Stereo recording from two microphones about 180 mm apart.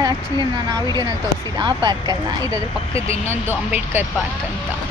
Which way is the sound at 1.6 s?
25° right (ahead or behind).